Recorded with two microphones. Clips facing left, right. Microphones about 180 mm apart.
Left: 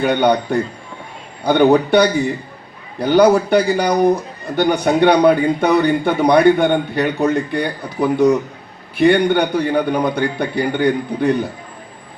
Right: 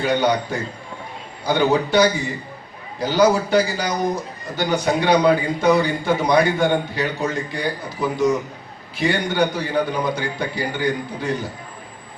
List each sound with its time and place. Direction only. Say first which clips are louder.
0.0 s a man's voice: left 4 dB; 60° left (ahead or behind)